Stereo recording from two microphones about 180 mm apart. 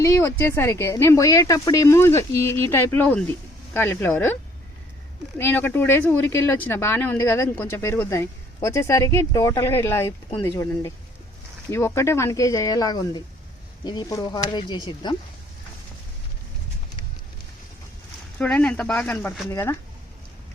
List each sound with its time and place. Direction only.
0.0 s speech: 15° left (ahead or behind)
5.4 s speech: 10° left (ahead or behind)
18.3 s speech: 5° left (ahead or behind)